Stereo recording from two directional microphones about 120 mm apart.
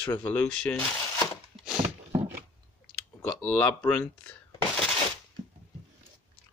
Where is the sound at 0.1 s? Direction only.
10° left (ahead or behind).